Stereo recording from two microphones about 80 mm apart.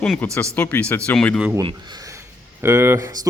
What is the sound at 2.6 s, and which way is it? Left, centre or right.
Speech, right.